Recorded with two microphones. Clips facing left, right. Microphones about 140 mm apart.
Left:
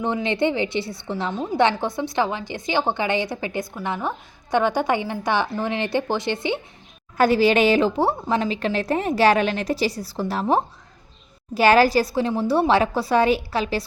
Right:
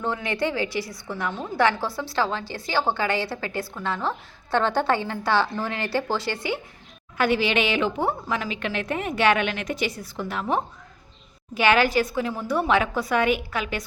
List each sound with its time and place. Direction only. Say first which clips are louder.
0.0 s a woman's voice: left 4 dB; 20° left (ahead or behind)
7.2 s a woman's voice: left 5 dB; 40° left (ahead or behind)